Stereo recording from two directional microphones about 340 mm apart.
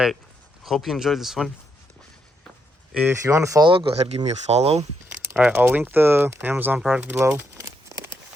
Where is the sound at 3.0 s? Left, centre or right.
Centre.